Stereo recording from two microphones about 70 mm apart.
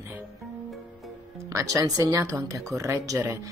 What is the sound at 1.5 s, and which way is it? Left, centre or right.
Speech, right.